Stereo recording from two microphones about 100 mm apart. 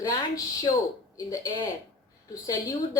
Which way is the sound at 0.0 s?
40° left (ahead or behind).